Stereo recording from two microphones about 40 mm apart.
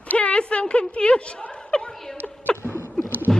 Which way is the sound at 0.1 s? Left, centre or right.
Left.